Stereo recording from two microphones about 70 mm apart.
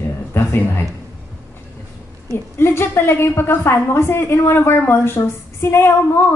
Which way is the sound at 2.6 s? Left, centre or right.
Left.